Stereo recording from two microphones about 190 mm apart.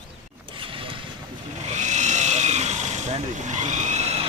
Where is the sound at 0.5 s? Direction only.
25° right (ahead or behind).